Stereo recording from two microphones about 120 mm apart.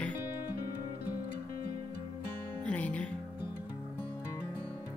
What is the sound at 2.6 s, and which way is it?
Music, 10° left (ahead or behind).